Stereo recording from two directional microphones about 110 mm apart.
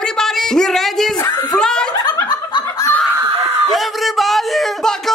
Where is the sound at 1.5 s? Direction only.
5° left (ahead or behind).